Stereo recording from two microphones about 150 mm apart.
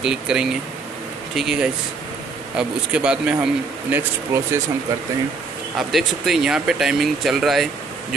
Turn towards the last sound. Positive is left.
turn(degrees=0)  # may be behind; listen again after turning